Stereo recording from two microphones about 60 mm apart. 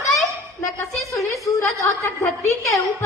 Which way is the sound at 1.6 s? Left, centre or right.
Left.